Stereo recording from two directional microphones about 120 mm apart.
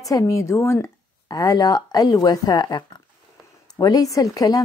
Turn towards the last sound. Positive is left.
turn(degrees=30)  # may be behind; listen again after turning